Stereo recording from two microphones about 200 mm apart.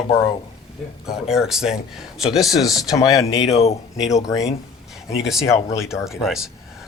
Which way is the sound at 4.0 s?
15° left (ahead or behind).